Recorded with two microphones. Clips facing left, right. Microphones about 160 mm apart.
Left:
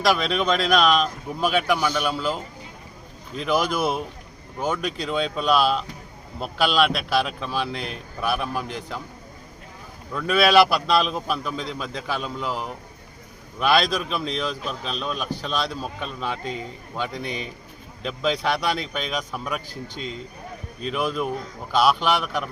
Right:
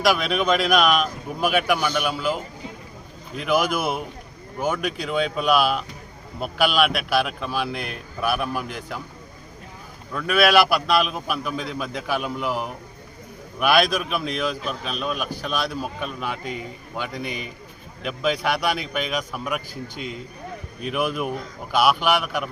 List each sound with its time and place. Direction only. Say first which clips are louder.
0.0 s speech: right 1 dB; 5° right (ahead or behind)
10.2 s a man's voice: left 1 dB; 5° right (ahead or behind)
20.8 s speech: even; 15° right (ahead or behind)